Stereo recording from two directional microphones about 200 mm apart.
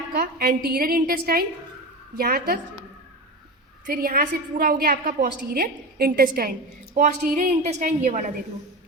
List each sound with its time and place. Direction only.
0.2 s a woman's voice: 50° right (ahead or behind)
3.8 s a woman's voice: 45° right (ahead or behind)